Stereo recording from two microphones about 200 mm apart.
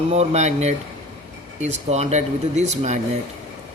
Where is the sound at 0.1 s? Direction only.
35° right (ahead or behind).